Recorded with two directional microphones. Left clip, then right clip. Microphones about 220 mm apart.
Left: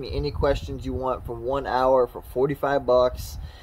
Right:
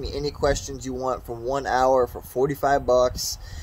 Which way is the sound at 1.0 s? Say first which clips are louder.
Even; 20° right (ahead or behind).